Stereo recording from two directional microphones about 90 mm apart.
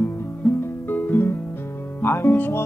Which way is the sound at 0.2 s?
25° left (ahead or behind).